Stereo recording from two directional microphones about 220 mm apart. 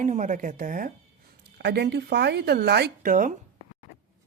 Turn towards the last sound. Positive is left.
turn(degrees=-40)  # may be behind; listen again after turning